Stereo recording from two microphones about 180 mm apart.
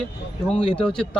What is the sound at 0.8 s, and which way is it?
Speech, 5° left (ahead or behind).